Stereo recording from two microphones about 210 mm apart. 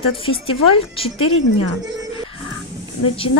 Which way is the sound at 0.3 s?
25° left (ahead or behind).